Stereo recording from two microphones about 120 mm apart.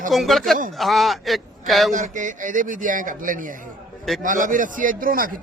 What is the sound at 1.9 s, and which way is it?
A man's voice, 90° right.